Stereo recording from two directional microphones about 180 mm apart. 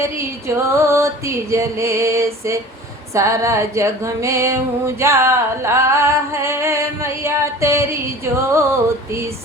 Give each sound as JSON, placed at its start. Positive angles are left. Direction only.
{"t": 0.4, "sound": "music", "side_deg": -15}